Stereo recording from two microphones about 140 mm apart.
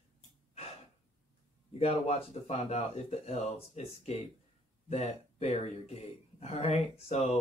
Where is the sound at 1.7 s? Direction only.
50° left (ahead or behind).